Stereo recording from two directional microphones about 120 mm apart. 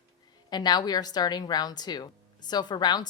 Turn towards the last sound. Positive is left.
turn(degrees=35)  # may be behind; listen again after turning